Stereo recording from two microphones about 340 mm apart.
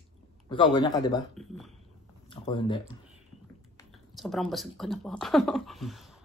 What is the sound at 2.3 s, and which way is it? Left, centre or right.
Speech, centre.